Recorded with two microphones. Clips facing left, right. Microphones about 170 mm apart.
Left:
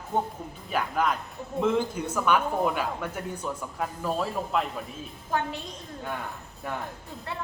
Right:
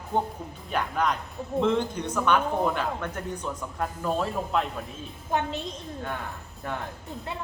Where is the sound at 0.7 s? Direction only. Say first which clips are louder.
Even; 5° left (ahead or behind).